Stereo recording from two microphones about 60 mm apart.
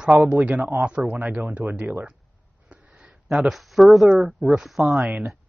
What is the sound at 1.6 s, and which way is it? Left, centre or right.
Speech, right.